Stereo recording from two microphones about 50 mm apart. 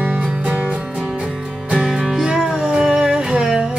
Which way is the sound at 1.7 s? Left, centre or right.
Centre.